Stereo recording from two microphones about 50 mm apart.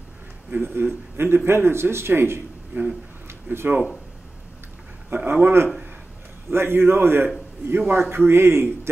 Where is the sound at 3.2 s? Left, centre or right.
Right.